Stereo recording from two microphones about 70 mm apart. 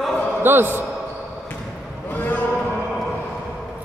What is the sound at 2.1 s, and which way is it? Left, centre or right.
Basketball bounce, left.